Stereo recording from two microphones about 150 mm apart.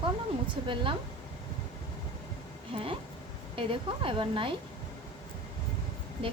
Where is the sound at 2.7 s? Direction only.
40° right (ahead or behind).